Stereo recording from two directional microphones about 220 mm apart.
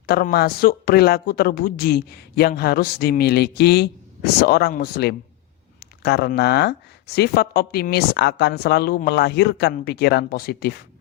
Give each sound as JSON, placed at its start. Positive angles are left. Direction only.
{"t": 0.0, "sound": "speech", "side_deg": 45}